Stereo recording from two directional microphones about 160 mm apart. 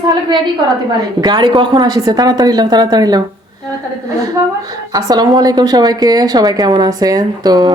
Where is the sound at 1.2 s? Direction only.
25° right (ahead or behind).